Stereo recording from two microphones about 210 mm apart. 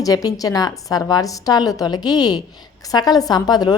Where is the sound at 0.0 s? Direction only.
15° left (ahead or behind).